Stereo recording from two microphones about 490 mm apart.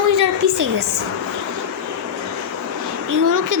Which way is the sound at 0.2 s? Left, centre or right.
Right.